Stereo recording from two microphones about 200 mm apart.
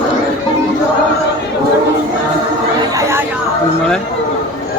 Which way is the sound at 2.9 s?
15° right (ahead or behind).